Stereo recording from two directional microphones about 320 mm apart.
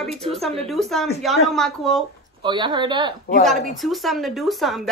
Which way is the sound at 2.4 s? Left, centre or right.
Centre.